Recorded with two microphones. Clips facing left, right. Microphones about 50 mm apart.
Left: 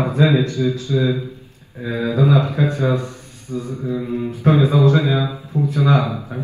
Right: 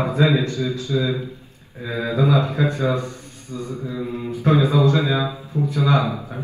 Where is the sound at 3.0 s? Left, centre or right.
Left.